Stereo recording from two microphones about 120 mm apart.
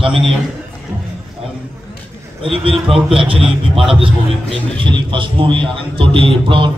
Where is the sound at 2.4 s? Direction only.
50° right (ahead or behind).